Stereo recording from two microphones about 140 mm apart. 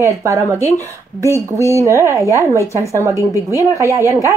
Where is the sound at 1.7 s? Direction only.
20° right (ahead or behind).